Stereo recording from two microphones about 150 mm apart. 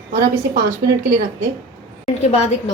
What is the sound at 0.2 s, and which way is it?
Speech, 20° right (ahead or behind).